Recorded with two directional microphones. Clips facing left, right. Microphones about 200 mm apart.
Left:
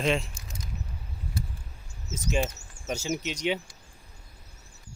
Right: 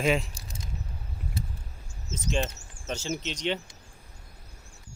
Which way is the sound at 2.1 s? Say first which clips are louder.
Left 1 dB; 10° left (ahead or behind).